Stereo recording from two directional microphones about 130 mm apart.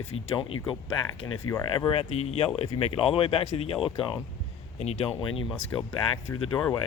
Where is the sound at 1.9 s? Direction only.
50° left (ahead or behind).